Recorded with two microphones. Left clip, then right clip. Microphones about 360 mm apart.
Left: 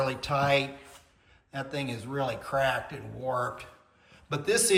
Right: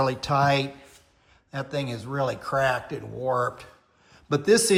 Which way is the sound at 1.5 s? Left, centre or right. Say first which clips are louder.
Right 4 dB; centre.